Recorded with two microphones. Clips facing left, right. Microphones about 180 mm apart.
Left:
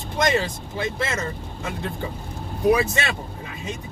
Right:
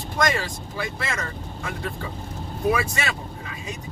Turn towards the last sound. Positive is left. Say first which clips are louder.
# left 4 dB
turn(degrees=25)  # may be behind; listen again after turning